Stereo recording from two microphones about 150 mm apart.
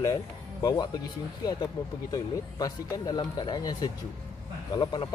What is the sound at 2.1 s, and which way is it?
A man's voice, 25° left (ahead or behind).